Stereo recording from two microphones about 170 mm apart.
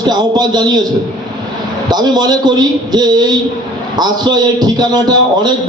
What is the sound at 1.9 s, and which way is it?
A man's voice, 25° right (ahead or behind).